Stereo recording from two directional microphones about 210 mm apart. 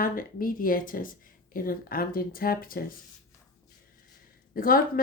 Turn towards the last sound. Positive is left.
turn(degrees=45)  # may be behind; listen again after turning